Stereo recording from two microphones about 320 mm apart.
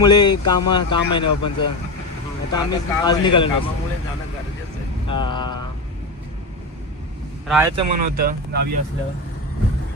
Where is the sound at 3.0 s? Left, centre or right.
Centre.